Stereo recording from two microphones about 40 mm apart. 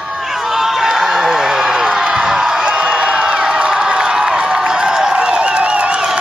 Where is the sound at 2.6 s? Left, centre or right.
Right.